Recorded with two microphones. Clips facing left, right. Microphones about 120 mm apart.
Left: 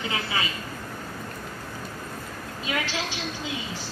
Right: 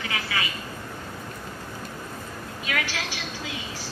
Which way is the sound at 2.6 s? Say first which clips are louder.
Left 1 dB; 25° left (ahead or behind).